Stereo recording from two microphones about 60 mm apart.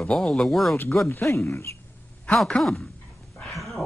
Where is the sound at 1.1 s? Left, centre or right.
Left.